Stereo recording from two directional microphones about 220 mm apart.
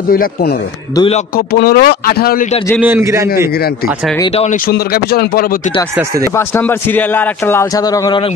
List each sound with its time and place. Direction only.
0.1 s speech: 45° left (ahead or behind)
0.9 s speech: 25° left (ahead or behind)
1.3 s speech: 45° left (ahead or behind)
2.8 s a man's voice: 10° right (ahead or behind)
4.5 s speech: 40° left (ahead or behind)
5.9 s a man's voice: 15° right (ahead or behind)
6.3 s a man's voice: 10° left (ahead or behind)